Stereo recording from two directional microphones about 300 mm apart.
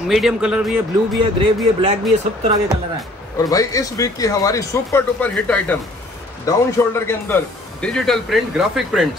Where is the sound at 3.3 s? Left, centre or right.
Centre.